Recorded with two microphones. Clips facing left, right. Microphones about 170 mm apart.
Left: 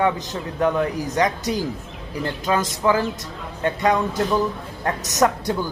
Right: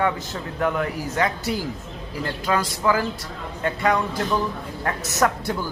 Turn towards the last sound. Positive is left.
turn(degrees=20)  # may be behind; listen again after turning